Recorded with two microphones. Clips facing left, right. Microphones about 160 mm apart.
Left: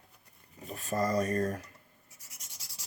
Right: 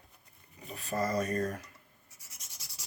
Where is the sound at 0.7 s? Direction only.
45° left (ahead or behind).